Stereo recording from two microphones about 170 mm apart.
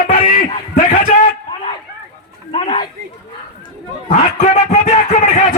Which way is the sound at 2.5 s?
30° left (ahead or behind).